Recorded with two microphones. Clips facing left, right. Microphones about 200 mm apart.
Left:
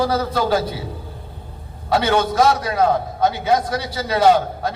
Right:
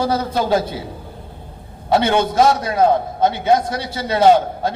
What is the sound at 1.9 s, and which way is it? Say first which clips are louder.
A man's voice: right 2 dB; 25° right (ahead or behind).